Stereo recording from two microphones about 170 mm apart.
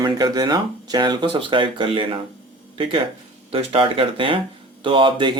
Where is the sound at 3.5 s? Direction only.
35° right (ahead or behind).